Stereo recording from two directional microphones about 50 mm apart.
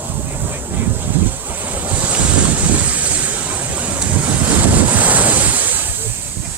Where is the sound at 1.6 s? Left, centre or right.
Right.